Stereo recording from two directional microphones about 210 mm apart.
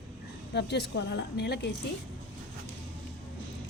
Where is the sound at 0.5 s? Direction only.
55° left (ahead or behind).